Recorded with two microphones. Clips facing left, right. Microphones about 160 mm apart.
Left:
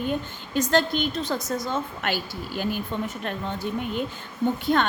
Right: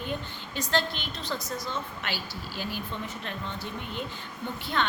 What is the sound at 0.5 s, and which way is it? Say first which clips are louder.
A woman's voice: left 7 dB; 45° left (ahead or behind).